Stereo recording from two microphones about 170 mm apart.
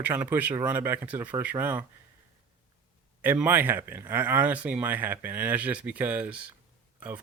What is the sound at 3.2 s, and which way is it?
Speech, 10° right (ahead or behind).